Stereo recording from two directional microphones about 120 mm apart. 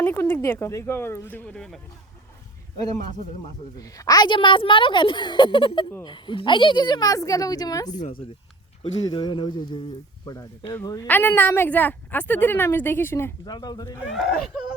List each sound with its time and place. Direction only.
0.0 s speech: 20° left (ahead or behind)
3.8 s a woman's voice: 30° left (ahead or behind)
10.6 s a woman's voice: 15° left (ahead or behind)
13.4 s a woman's voice: 35° left (ahead or behind)
14.1 s speech: centre (ahead or behind)